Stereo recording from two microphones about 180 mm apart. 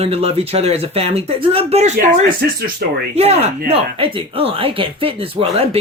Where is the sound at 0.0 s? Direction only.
35° right (ahead or behind).